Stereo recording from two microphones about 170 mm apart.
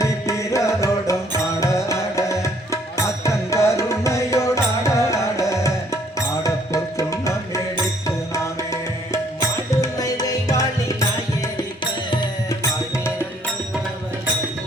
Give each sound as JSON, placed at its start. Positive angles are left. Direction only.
{"t": 0.0, "sound": "music", "side_deg": 20}
{"t": 12.1, "sound": "music", "side_deg": 25}